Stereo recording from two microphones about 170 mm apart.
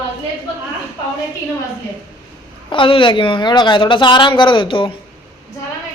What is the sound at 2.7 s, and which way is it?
Speech, 30° left (ahead or behind).